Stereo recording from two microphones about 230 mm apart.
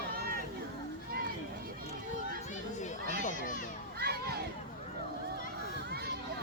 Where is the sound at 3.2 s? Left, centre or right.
Left.